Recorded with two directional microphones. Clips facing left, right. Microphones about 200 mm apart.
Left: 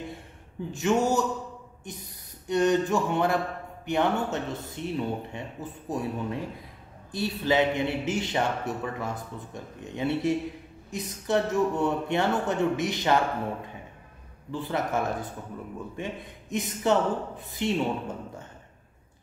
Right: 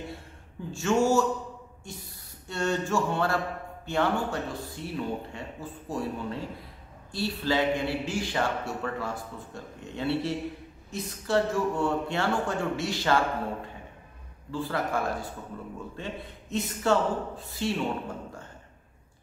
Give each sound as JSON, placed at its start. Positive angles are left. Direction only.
{"t": 0.7, "sound": "a man's voice", "side_deg": 20}
{"t": 1.9, "sound": "a sound", "side_deg": 20}
{"t": 3.8, "sound": "a man's voice", "side_deg": 20}
{"t": 14.5, "sound": "a man's voice", "side_deg": 20}